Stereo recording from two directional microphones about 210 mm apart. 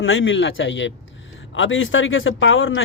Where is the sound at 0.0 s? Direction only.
65° left (ahead or behind).